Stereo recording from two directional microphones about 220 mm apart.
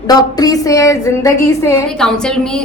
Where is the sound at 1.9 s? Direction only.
5° left (ahead or behind).